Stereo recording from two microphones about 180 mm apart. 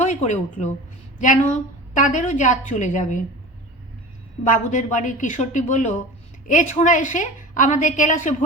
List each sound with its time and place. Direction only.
0.0 s a woman's voice: 40° left (ahead or behind)
4.4 s a woman's voice: 45° left (ahead or behind)